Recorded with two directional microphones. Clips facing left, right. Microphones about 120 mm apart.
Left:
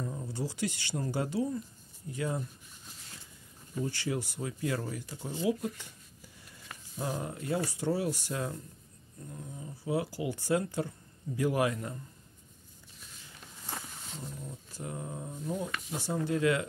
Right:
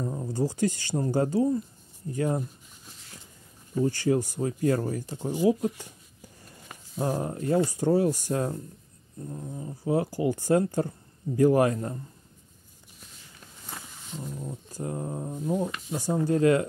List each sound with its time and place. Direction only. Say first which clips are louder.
0.0 s speech: right 8 dB; 35° right (ahead or behind)
3.7 s speech: right 9 dB; 40° right (ahead or behind)
5.0 s speech: right 9 dB; 20° right (ahead or behind)
5.8 s a sound: right 5 dB; 45° right (ahead or behind)
7.0 s speech: right 7 dB; 40° right (ahead or behind)
14.4 s speech: right 7 dB; 35° right (ahead or behind)